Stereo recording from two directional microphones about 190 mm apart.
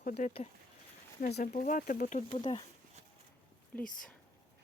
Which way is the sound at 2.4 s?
25° left (ahead or behind).